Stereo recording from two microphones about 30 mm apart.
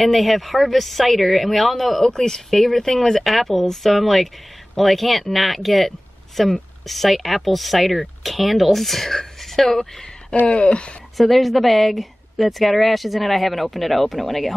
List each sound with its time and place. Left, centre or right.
0.0 s speech: centre
2.1 s speech: centre
10.4 s speech: left
11.1 s speech: centre